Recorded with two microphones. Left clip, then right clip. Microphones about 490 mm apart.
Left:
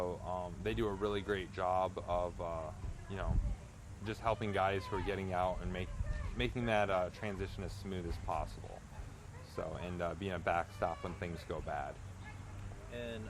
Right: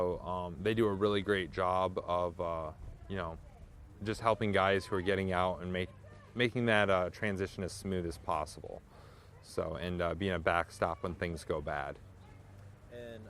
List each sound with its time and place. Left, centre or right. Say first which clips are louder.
0.0 s speech: right 4 dB; right
9.6 s speech: right 5 dB; right
12.9 s boat: left 3 dB; right